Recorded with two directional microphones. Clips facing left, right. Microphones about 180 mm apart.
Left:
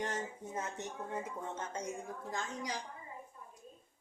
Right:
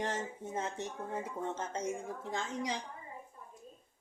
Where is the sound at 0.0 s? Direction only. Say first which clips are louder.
Right 2 dB; 25° right (ahead or behind).